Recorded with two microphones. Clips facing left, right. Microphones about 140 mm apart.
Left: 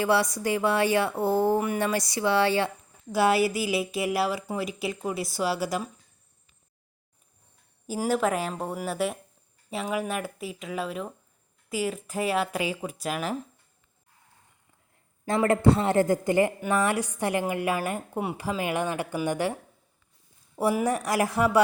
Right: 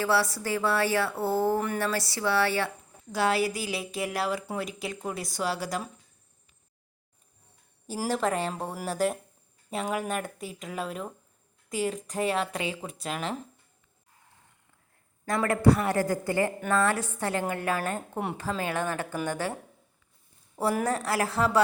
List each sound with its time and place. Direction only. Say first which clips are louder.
0.0 s a woman's voice: left 2 dB; 20° left (ahead or behind)
7.9 s a woman's voice: left 3 dB; 5° left (ahead or behind)
15.3 s a woman's voice: left 2 dB; 25° left (ahead or behind)
20.6 s a woman's voice: left 2 dB; 10° left (ahead or behind)